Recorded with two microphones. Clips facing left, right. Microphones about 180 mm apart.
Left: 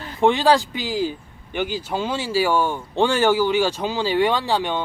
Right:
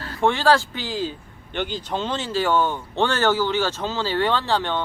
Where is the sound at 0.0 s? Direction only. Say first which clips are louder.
Left 3 dB; 15° left (ahead or behind).